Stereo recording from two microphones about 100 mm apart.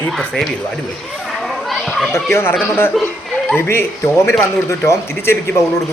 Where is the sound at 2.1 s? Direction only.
25° left (ahead or behind).